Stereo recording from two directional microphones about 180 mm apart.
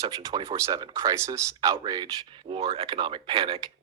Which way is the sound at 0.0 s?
20° right (ahead or behind).